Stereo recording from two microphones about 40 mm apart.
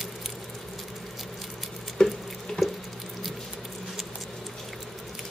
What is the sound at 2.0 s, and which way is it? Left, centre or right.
Drip, centre.